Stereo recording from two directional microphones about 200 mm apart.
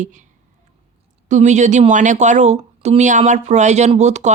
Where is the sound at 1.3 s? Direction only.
35° right (ahead or behind).